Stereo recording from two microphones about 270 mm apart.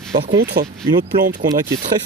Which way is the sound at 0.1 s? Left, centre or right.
Centre.